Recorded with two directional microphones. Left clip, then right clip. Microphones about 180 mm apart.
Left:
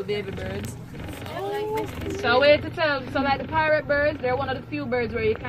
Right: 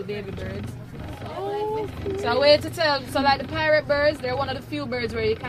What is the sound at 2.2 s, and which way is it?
A woman's voice, 10° left (ahead or behind).